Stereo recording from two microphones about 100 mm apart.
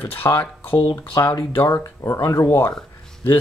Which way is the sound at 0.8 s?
30° left (ahead or behind).